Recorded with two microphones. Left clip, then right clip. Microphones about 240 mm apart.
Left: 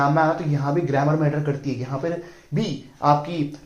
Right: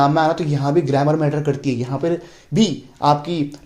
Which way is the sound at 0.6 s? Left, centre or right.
Right.